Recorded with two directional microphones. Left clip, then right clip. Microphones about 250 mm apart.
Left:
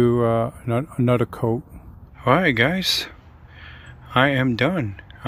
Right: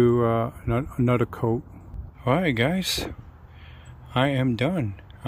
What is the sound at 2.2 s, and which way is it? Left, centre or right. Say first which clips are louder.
Speech: left 6 dB; centre.